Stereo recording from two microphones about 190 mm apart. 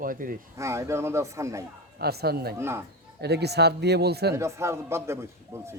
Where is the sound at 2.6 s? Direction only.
15° right (ahead or behind).